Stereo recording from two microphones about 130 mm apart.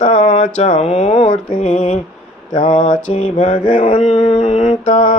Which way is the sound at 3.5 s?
40° left (ahead or behind).